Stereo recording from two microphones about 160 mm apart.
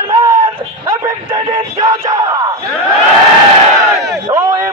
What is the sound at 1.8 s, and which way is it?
Crowd, 20° right (ahead or behind).